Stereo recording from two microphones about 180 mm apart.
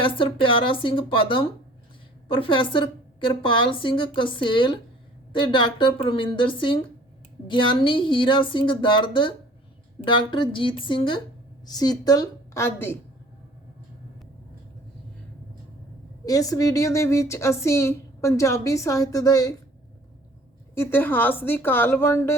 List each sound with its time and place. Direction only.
0.0 s a woman's voice: 30° left (ahead or behind)
16.2 s speech: 20° left (ahead or behind)
20.7 s speech: 10° left (ahead or behind)